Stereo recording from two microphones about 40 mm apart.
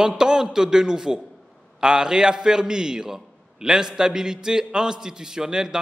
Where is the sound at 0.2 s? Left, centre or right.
Centre.